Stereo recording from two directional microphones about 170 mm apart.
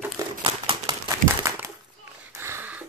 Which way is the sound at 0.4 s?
25° right (ahead or behind).